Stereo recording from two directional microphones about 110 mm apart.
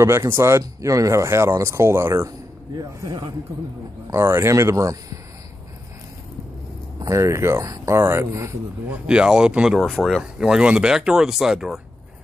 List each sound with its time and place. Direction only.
0.0 s speech: 25° right (ahead or behind)
2.7 s speech: 35° right (ahead or behind)
4.1 s speech: 20° right (ahead or behind)
7.0 s speech: 30° right (ahead or behind)
8.9 s speech: 10° right (ahead or behind)